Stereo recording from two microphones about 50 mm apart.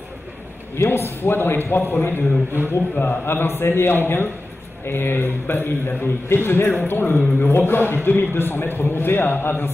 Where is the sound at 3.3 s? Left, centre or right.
Left.